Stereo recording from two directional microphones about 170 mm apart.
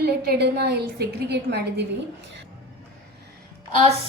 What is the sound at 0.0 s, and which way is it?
A woman's voice, 70° right (ahead or behind).